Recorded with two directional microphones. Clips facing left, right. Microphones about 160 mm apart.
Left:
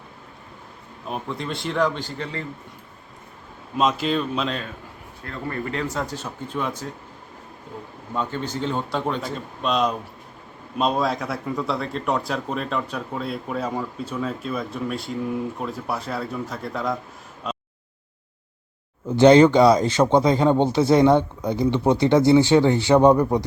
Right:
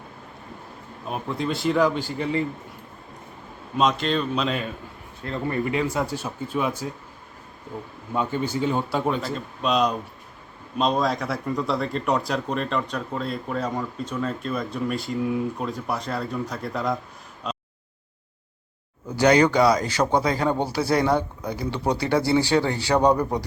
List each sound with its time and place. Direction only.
1.0 s speech: centre (ahead or behind)
3.8 s speech: 5° left (ahead or behind)
5.2 s speech: 20° right (ahead or behind)
5.7 s a man's voice: 10° right (ahead or behind)
8.1 s a man's voice: 10° right (ahead or behind)
17.5 s a sound: 5° left (ahead or behind)
19.0 s speech: 25° left (ahead or behind)